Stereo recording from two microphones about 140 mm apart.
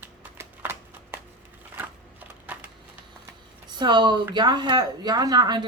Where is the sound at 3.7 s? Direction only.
30° right (ahead or behind).